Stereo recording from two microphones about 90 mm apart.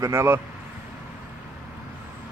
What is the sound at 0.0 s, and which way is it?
Speech, 30° right (ahead or behind).